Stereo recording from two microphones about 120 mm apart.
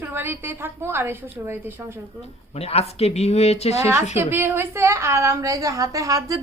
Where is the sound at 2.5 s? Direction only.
60° left (ahead or behind).